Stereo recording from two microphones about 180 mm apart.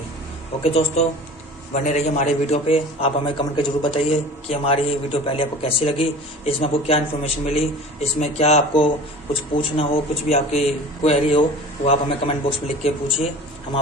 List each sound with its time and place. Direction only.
0.6 s a man's voice: 35° left (ahead or behind)